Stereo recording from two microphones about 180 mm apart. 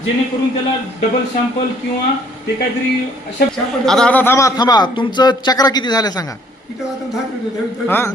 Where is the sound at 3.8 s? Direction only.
5° left (ahead or behind); by 6.2 s 20° left (ahead or behind).